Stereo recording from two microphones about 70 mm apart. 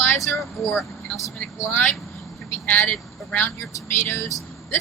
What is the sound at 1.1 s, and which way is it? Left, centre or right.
Speech, left.